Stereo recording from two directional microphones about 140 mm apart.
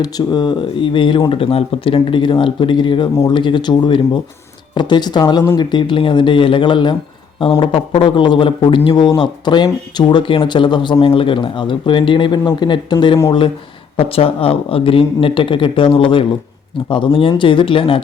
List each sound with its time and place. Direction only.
0.0 s speech: 30° left (ahead or behind)